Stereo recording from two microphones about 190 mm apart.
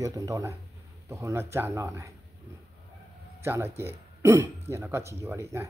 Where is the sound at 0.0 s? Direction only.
15° right (ahead or behind).